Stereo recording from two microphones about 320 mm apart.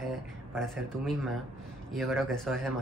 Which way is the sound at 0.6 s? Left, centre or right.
Centre.